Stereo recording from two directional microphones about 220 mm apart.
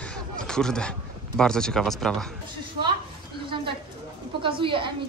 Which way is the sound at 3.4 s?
20° right (ahead or behind).